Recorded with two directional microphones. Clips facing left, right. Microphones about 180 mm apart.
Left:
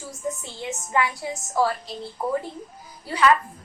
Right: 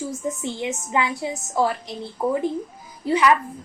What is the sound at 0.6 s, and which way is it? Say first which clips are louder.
A woman's voice: even; 20° right (ahead or behind).